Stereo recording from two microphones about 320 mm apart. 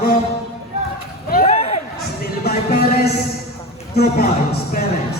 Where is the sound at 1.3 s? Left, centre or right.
Left.